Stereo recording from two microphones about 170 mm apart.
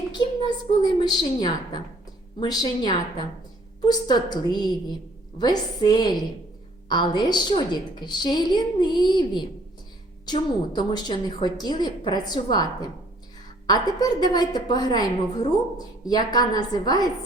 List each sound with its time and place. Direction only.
0.8 s a woman's voice: 25° left (ahead or behind)